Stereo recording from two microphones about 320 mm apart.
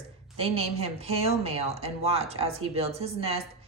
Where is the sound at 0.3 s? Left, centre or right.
Centre.